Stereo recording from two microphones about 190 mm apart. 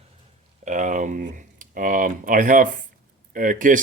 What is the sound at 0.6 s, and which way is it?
Speech, 40° right (ahead or behind).